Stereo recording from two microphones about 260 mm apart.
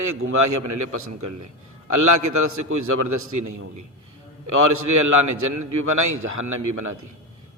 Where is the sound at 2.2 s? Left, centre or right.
Right.